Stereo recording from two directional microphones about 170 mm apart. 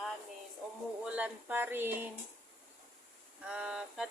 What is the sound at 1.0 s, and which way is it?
Speech, 10° right (ahead or behind).